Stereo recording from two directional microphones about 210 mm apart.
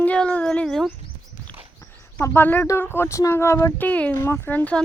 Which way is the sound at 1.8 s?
10° left (ahead or behind).